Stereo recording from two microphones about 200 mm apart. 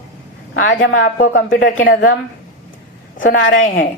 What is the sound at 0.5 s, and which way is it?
Speech, 75° left (ahead or behind).